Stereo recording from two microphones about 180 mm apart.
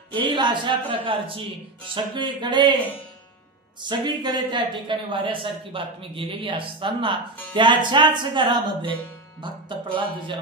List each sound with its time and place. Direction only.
0.1 s speech: 25° right (ahead or behind)
3.8 s speech: 25° right (ahead or behind)